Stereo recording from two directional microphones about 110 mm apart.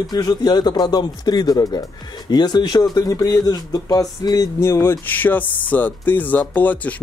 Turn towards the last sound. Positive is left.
turn(degrees=15)  # may be behind; listen again after turning